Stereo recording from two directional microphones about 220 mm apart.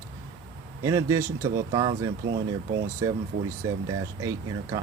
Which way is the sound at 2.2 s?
50° right (ahead or behind).